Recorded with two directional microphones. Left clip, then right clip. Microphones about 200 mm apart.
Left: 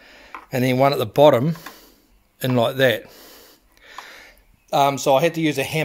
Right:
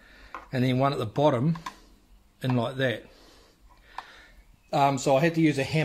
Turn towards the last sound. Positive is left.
turn(degrees=50)  # may be behind; listen again after turning